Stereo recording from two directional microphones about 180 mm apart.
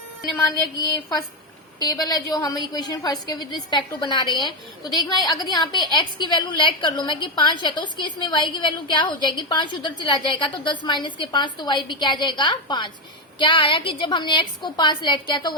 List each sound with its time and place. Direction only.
1.8 s a woman's voice: 20° left (ahead or behind)